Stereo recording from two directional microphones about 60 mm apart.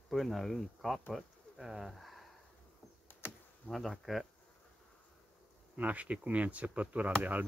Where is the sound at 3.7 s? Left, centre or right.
Centre.